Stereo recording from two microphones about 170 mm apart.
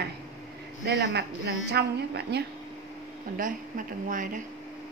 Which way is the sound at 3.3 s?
50° right (ahead or behind).